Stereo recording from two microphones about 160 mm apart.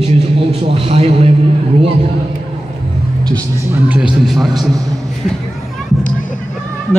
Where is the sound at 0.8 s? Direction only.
40° right (ahead or behind).